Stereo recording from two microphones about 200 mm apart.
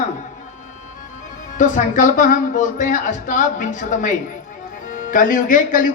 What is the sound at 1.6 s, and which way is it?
Speech, 40° left (ahead or behind).